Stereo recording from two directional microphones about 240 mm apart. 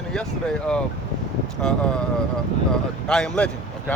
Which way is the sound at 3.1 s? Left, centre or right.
Centre.